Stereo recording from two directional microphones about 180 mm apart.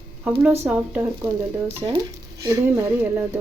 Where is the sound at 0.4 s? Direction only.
10° right (ahead or behind).